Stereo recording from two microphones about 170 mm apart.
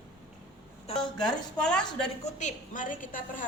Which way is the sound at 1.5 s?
5° left (ahead or behind).